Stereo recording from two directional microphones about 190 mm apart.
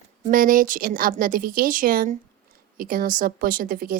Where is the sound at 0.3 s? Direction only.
45° right (ahead or behind).